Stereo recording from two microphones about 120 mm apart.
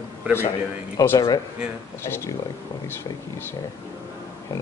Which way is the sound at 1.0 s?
25° left (ahead or behind).